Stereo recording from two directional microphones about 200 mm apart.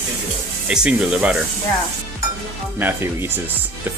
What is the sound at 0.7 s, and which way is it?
Speech, 5° right (ahead or behind).